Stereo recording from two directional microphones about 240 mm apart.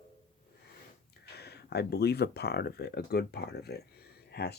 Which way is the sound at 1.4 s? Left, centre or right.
Left.